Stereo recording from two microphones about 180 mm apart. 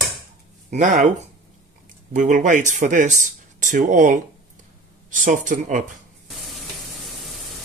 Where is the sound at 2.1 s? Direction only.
45° right (ahead or behind).